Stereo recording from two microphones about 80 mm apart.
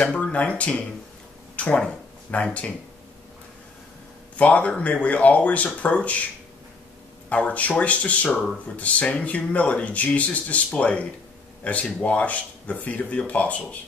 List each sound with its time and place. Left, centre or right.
0.0 s speech: centre
4.4 s speech: centre
7.2 s speech: centre
8.3 s speech: centre
8.7 s speech: centre